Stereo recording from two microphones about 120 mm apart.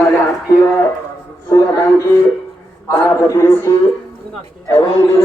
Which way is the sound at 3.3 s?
25° left (ahead or behind).